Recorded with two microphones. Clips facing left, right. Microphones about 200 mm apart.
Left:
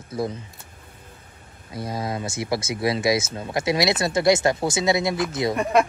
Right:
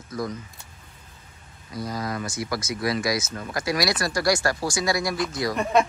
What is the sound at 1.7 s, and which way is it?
Speech, 25° left (ahead or behind).